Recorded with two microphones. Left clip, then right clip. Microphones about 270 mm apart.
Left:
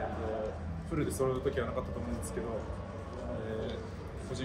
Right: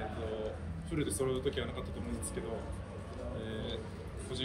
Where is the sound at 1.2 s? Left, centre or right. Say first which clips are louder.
Left 3 dB; centre.